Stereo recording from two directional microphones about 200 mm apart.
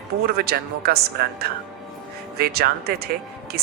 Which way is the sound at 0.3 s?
50° right (ahead or behind).